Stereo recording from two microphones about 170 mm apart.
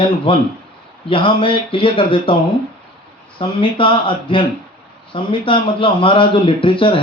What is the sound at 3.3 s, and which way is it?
Speech, 30° left (ahead or behind).